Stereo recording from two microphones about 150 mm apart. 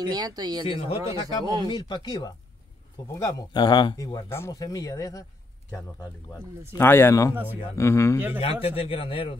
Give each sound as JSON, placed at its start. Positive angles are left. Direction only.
{"t": 0.0, "sound": "speech", "side_deg": -25}
{"t": 0.7, "sound": "a man's voice", "side_deg": 40}
{"t": 1.4, "sound": "speech", "side_deg": -30}
{"t": 1.7, "sound": "speech", "side_deg": 30}
{"t": 6.8, "sound": "a man's voice", "side_deg": 15}
{"t": 8.4, "sound": "a man's voice", "side_deg": 40}